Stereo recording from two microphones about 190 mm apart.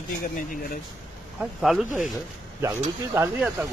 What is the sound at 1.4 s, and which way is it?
Speech, centre (ahead or behind).